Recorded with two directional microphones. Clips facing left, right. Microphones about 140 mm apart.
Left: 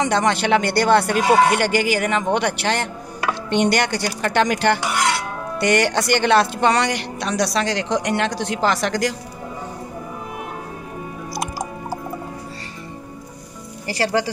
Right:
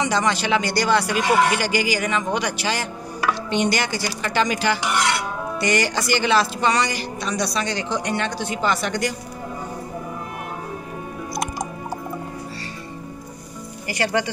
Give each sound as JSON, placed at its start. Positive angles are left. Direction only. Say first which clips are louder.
{"t": 0.0, "sound": "speech", "louder": "left 3 dB", "side_deg": 55}
{"t": 11.3, "sound": "music", "louder": "even", "side_deg": 5}
{"t": 13.8, "sound": "speech", "louder": "left 2 dB", "side_deg": 30}